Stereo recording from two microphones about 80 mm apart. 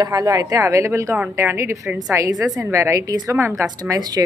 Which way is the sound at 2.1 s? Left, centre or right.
Right.